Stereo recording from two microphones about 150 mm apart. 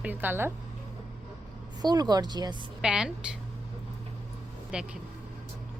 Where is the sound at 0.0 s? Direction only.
10° right (ahead or behind).